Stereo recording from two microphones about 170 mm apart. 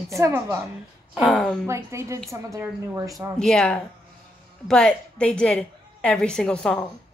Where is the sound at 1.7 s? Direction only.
15° right (ahead or behind).